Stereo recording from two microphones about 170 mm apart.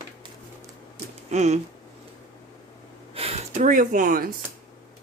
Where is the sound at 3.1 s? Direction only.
40° right (ahead or behind); by 4.3 s 55° right (ahead or behind).